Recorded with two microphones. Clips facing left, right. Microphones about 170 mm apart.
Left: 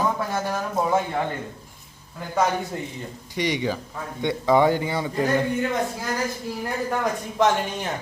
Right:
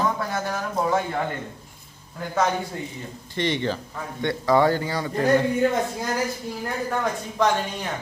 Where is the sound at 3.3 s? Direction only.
10° left (ahead or behind).